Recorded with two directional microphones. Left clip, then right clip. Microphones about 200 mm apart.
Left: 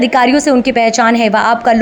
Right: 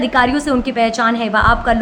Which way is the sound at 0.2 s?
25° left (ahead or behind).